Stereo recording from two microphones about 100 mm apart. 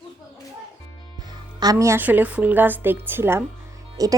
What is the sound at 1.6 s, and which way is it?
Speech, 35° right (ahead or behind).